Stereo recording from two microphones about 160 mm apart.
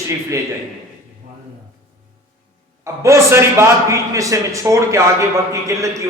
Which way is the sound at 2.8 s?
20° right (ahead or behind).